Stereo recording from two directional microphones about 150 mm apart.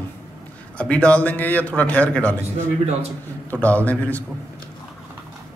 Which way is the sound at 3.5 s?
10° left (ahead or behind).